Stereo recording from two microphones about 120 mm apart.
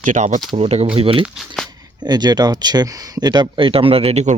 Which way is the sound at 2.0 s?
35° right (ahead or behind).